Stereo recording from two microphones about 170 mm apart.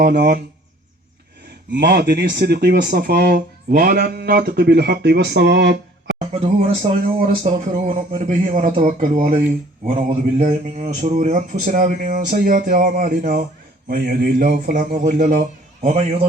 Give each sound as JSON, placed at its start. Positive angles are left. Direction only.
{"t": 0.0, "sound": "speech", "side_deg": -70}
{"t": 1.7, "sound": "speech", "side_deg": -70}
{"t": 6.1, "sound": "a man's voice", "side_deg": -40}
{"t": 9.9, "sound": "a man's voice", "side_deg": -40}